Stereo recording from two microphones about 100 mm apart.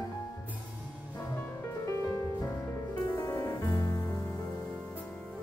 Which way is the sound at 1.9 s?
30° left (ahead or behind).